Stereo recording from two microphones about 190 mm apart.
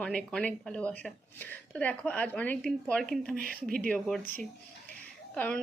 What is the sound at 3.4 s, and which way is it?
Speech, 50° right (ahead or behind).